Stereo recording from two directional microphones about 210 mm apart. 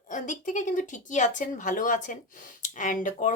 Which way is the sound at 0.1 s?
35° left (ahead or behind).